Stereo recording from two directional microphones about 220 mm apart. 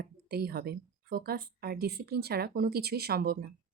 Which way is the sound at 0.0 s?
45° right (ahead or behind).